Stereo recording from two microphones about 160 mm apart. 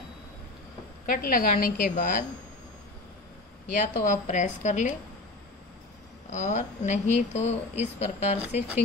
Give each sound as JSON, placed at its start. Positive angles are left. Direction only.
{"t": 1.0, "sound": "a woman's voice", "side_deg": 65}
{"t": 3.8, "sound": "speech", "side_deg": 50}
{"t": 6.3, "sound": "speech", "side_deg": 45}